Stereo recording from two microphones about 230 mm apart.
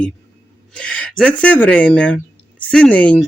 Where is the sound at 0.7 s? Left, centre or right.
Centre.